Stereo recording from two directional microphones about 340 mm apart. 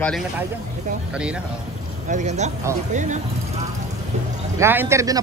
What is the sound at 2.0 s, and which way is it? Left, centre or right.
Speech, right.